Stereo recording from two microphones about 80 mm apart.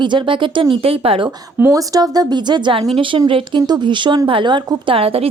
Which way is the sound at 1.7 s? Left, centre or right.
Right.